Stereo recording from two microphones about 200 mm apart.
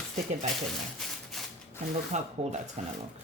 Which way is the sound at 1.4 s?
Centre (ahead or behind).